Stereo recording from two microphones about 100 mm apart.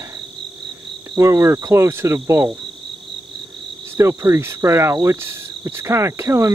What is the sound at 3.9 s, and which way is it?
Cricket, 30° right (ahead or behind).